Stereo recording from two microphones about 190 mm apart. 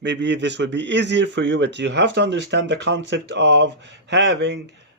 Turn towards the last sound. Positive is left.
turn(degrees=-70)  # may be behind; listen again after turning